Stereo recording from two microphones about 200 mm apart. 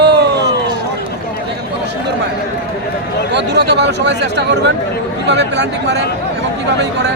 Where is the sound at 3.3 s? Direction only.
60° right (ahead or behind).